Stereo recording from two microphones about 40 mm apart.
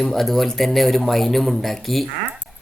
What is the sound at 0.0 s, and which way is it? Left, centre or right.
Speech, centre.